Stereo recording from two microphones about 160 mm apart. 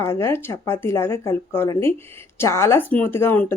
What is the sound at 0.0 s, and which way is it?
Speech, 15° left (ahead or behind).